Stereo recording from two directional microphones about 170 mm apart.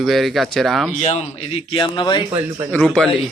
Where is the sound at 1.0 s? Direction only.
40° left (ahead or behind).